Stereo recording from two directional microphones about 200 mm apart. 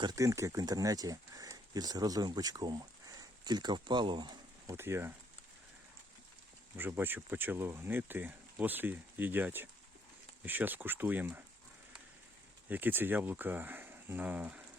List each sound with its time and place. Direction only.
0.0 s speech: 20° right (ahead or behind)
6.7 s speech: 10° right (ahead or behind)
12.6 s speech: 10° right (ahead or behind)